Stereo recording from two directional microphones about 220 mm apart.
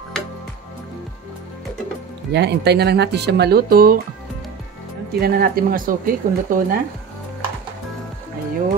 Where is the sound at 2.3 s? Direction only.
50° right (ahead or behind).